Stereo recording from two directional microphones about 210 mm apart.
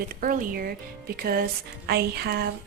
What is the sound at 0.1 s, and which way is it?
A woman's voice, 40° right (ahead or behind).